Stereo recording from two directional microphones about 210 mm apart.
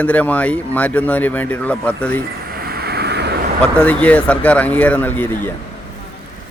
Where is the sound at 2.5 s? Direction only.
45° right (ahead or behind).